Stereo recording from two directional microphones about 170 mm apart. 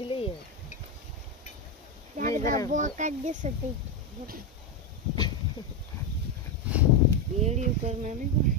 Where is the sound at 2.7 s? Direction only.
45° right (ahead or behind).